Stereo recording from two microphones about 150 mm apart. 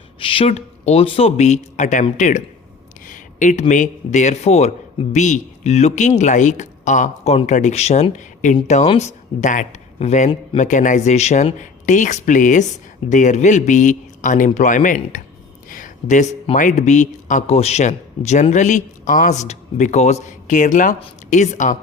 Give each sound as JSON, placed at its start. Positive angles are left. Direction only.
{"t": 0.2, "sound": "speech", "side_deg": 35}